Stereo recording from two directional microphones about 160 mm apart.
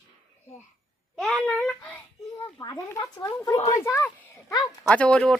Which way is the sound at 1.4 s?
10° left (ahead or behind).